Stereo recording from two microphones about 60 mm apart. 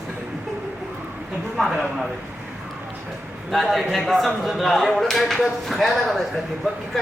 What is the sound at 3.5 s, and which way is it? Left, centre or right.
Speech, centre.